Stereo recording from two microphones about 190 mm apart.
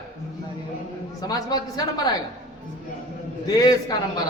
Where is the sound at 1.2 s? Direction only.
20° left (ahead or behind).